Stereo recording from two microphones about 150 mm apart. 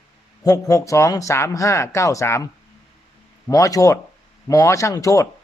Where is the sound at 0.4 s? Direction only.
20° left (ahead or behind).